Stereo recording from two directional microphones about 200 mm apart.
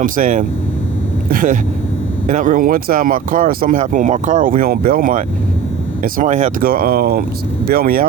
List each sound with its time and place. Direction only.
0.0 s speech: 40° right (ahead or behind)